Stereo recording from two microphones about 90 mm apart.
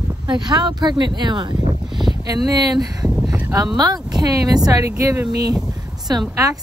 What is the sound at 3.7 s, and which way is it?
Speech, 50° right (ahead or behind).